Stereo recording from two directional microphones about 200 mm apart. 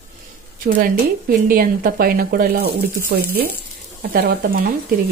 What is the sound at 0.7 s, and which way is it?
Speech, 50° right (ahead or behind).